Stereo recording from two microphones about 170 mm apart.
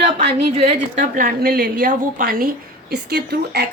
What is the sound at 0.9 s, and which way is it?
A woman's voice, 50° right (ahead or behind).